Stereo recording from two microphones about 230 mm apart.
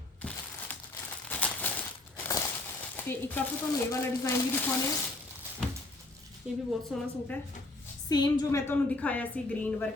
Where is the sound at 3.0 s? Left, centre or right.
Centre.